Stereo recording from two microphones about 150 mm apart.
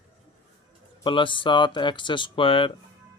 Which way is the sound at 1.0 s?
35° left (ahead or behind).